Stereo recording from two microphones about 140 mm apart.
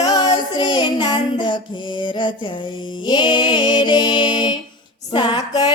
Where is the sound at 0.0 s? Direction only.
30° left (ahead or behind).